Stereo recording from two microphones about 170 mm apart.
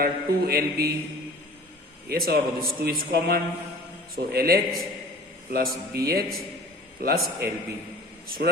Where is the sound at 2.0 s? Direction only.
65° right (ahead or behind).